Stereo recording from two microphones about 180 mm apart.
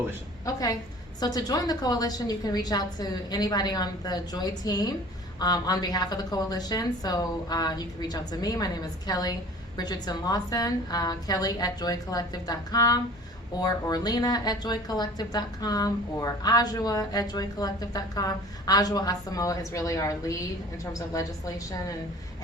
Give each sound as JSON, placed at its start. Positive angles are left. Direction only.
{"t": 0.4, "sound": "speech", "side_deg": 20}